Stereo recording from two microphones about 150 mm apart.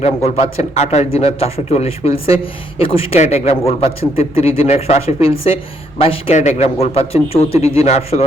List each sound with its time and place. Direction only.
0.0 s a man's voice: 40° left (ahead or behind)